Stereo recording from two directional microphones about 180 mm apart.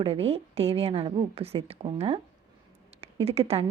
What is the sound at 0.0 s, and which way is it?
A woman's voice, 35° right (ahead or behind).